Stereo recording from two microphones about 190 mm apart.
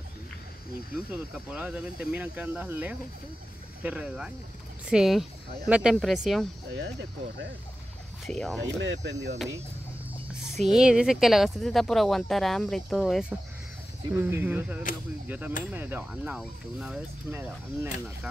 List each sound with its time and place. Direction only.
0.9 s speech: 5° right (ahead or behind)
6.7 s speech: 65° right (ahead or behind)
8.3 s speech: 5° left (ahead or behind)
8.8 s speech: 70° right (ahead or behind)
10.7 s speech: 5° right (ahead or behind)